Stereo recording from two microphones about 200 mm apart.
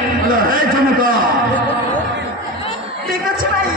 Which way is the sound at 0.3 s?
45° right (ahead or behind).